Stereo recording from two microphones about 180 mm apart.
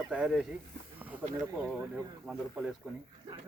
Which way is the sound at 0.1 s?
5° right (ahead or behind).